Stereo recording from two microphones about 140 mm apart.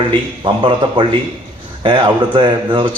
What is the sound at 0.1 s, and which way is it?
A man's voice, 35° right (ahead or behind).